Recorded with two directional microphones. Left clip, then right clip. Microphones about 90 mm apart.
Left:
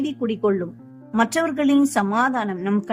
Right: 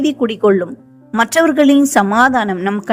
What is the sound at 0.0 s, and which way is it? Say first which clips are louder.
Speech: right 9 dB; 50° right (ahead or behind).